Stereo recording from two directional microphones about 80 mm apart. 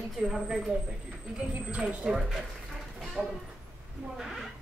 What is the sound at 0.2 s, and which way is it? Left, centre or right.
Speech, centre.